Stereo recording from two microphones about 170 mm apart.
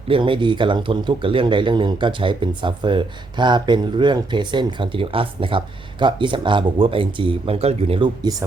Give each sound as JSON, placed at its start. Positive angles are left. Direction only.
{"t": 0.1, "sound": "speech", "side_deg": -30}